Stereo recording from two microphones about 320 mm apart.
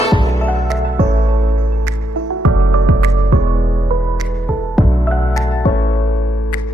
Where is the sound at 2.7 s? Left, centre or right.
Right.